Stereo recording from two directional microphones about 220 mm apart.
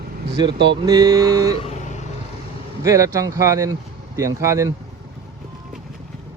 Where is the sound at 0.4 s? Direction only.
20° right (ahead or behind).